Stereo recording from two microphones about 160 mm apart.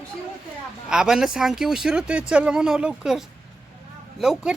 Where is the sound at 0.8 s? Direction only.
5° right (ahead or behind).